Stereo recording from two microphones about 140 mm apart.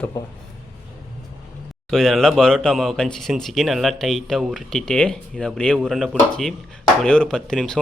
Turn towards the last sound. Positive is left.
turn(degrees=5)  # may be behind; listen again after turning